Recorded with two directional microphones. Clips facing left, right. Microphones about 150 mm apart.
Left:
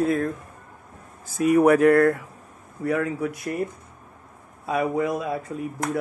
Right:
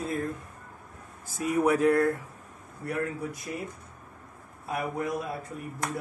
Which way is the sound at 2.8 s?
90° left.